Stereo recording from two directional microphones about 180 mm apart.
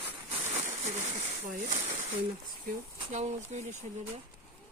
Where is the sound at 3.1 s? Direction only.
40° right (ahead or behind).